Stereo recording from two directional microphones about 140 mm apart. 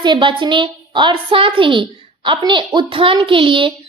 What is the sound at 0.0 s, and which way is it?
A woman's voice, 35° right (ahead or behind).